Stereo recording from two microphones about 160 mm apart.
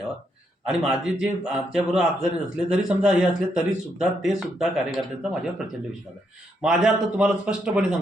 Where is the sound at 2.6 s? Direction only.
5° right (ahead or behind).